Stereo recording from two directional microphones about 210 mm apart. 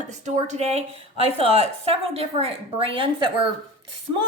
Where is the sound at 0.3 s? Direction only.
35° right (ahead or behind).